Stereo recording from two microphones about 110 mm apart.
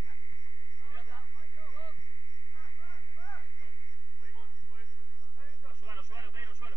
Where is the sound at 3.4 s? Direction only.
50° left (ahead or behind).